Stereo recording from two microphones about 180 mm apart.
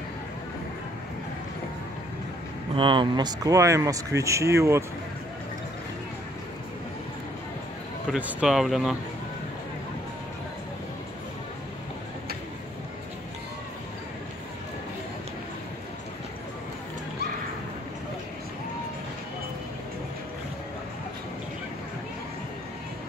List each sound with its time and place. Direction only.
2.7 s speech: 30° right (ahead or behind)
8.1 s speech: 5° right (ahead or behind)